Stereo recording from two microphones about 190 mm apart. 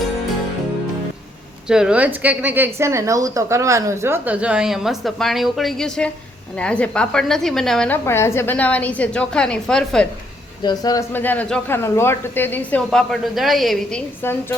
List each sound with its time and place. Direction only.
1.6 s a woman's voice: 5° right (ahead or behind)
10.6 s speech: 20° left (ahead or behind); by 14.0 s centre (ahead or behind)
14.2 s speech: 10° left (ahead or behind)